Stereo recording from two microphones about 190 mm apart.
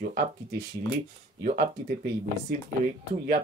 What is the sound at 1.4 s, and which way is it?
Speech, 50° right (ahead or behind).